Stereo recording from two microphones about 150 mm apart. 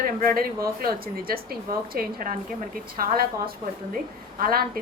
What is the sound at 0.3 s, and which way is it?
A woman's voice, 85° right.